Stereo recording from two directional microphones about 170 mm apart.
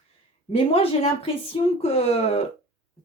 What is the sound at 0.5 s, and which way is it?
Speech, 35° left (ahead or behind).